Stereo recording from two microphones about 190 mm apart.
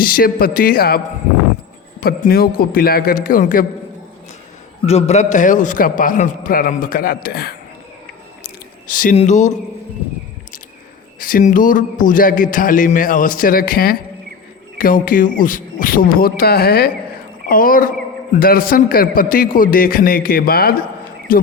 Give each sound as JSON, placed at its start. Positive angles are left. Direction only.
{"t": 0.0, "sound": "a man's voice", "side_deg": 50}
{"t": 4.9, "sound": "a man's voice", "side_deg": 35}
{"t": 8.9, "sound": "a man's voice", "side_deg": 45}
{"t": 9.1, "sound": "a sound", "side_deg": 40}
{"t": 11.2, "sound": "a man's voice", "side_deg": 45}